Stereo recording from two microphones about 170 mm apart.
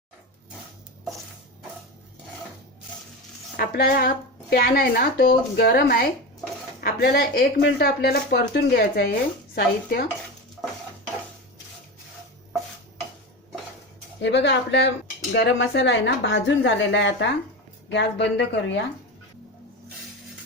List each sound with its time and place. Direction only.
3.6 s speech: 65° left (ahead or behind)
14.2 s speech: 90° left